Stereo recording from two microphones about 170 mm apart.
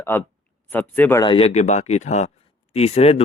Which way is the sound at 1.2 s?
35° left (ahead or behind).